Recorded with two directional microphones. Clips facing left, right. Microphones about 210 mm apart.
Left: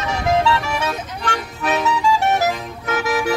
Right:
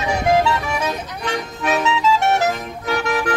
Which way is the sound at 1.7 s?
Centre (ahead or behind).